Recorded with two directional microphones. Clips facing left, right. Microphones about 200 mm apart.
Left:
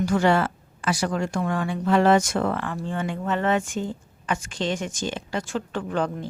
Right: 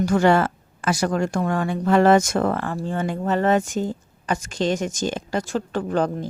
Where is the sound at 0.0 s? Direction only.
45° right (ahead or behind).